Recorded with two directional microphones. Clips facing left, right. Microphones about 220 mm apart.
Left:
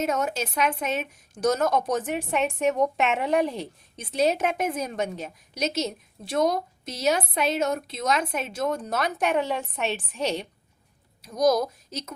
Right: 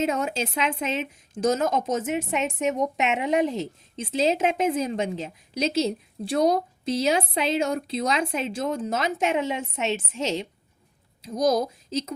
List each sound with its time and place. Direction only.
0.0 s speech: 25° right (ahead or behind)